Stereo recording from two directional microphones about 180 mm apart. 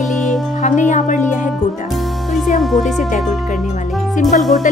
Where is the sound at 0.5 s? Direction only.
45° left (ahead or behind).